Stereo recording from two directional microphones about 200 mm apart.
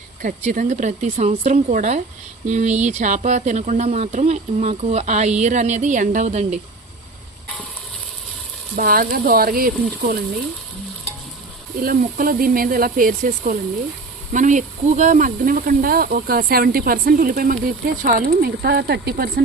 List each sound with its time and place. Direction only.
0.2 s speech: 40° right (ahead or behind)
8.7 s speech: 45° right (ahead or behind)
11.8 s speech: 45° right (ahead or behind)